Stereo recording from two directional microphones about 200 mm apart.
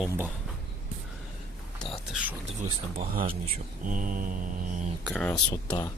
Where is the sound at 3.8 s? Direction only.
40° right (ahead or behind).